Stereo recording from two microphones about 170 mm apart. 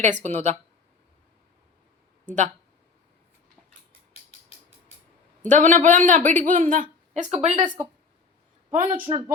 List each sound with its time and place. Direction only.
0.0 s a man's voice: 45° right (ahead or behind)
2.2 s speech: 45° right (ahead or behind)
5.5 s a man's voice: 50° right (ahead or behind)
9.0 s speech: 25° right (ahead or behind)